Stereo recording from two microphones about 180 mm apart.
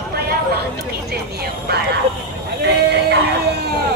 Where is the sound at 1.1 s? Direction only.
60° right (ahead or behind).